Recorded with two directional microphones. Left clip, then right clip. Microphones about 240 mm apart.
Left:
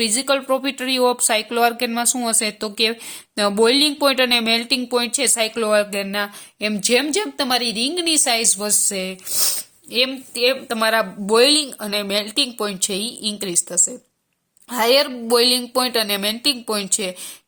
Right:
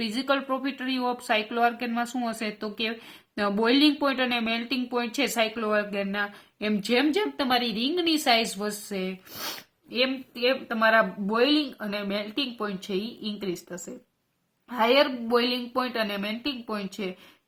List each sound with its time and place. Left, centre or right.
0.0 s a woman's voice: left